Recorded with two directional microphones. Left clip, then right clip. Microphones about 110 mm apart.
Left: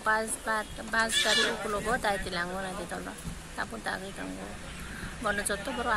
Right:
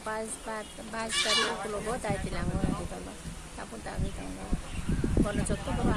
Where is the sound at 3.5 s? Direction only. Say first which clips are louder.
Left 7 dB; 25° left (ahead or behind).